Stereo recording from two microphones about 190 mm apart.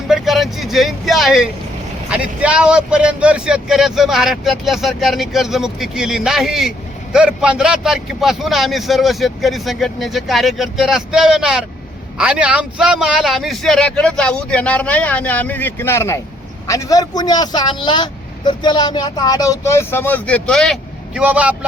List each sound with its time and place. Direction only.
0.1 s speech: centre (ahead or behind)